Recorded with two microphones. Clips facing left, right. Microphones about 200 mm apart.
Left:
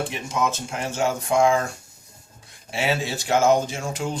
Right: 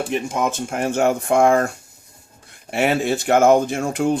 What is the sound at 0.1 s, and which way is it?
Speech, 55° right (ahead or behind).